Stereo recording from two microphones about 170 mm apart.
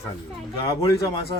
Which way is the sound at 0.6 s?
20° left (ahead or behind).